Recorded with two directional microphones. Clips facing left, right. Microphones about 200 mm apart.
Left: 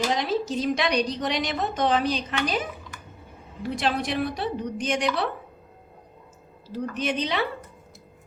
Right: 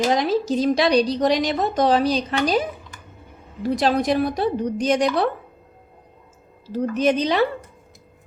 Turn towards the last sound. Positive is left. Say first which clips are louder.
# right 8 dB
turn(degrees=-40)  # may be behind; listen again after turning